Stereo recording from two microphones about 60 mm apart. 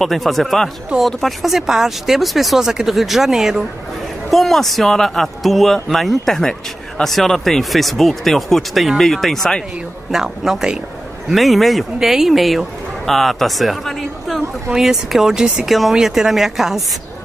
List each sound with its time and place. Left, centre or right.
0.0 s speech: centre
10.1 s a man's voice: centre